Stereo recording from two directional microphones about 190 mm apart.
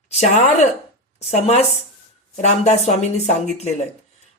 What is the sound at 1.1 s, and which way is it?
Speech, 35° left (ahead or behind).